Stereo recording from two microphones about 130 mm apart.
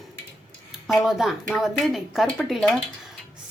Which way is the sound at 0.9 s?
Centre (ahead or behind).